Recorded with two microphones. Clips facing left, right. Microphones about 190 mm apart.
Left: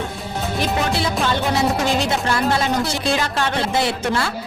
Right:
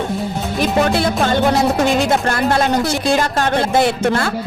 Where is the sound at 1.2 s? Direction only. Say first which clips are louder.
Right 5 dB; 50° right (ahead or behind).